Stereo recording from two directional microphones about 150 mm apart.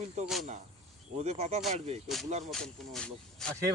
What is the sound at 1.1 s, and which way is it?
Speech, 45° right (ahead or behind).